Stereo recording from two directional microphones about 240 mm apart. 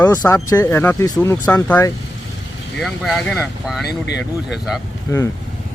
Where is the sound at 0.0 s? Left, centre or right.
Centre.